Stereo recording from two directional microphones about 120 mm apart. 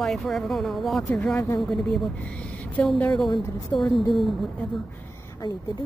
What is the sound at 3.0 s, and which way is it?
Speech, 5° left (ahead or behind).